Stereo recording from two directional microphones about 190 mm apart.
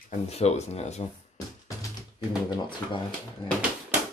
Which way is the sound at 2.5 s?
25° left (ahead or behind).